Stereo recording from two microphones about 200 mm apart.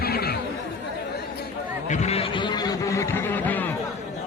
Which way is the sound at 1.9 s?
35° left (ahead or behind).